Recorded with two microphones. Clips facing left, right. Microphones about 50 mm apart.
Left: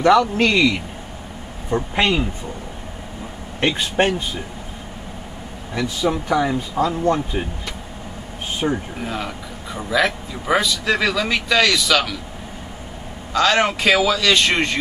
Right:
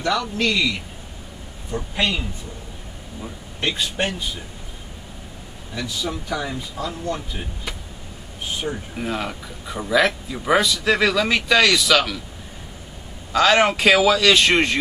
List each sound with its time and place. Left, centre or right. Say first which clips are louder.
0.2 s a man's voice: left 5 dB; left
3.6 s a man's voice: left 5 dB; left
5.8 s a man's voice: left 6 dB; left
8.6 s a man's voice: left 8 dB; left
9.0 s a man's voice: even; centre
13.3 s a man's voice: right 1 dB; centre